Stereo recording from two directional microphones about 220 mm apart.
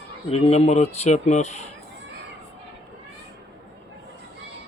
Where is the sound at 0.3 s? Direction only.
25° left (ahead or behind).